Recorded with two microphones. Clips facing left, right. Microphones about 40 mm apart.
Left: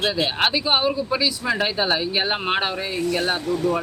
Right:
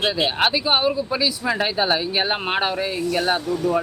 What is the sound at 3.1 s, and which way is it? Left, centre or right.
Speech, centre.